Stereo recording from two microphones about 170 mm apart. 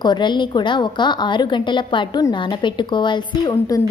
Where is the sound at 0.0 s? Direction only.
25° left (ahead or behind).